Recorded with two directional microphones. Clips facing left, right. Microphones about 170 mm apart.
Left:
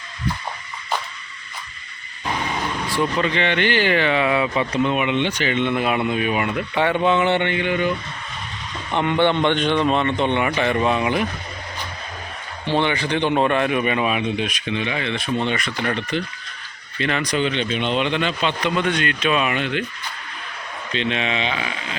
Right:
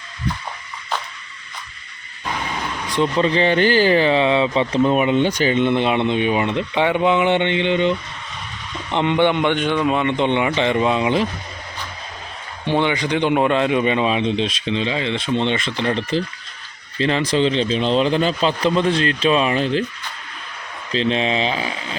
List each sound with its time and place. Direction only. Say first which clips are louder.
2.9 s a man's voice: right 4 dB; 25° right (ahead or behind)
12.6 s speech: right 2 dB; 15° right (ahead or behind); by 19.8 s 35° right (ahead or behind)
20.9 s speech: right 4 dB; 35° right (ahead or behind)